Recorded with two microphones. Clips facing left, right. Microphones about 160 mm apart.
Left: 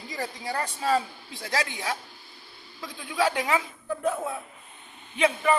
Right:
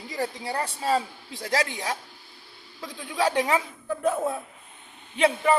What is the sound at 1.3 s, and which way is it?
Speech, 40° right (ahead or behind).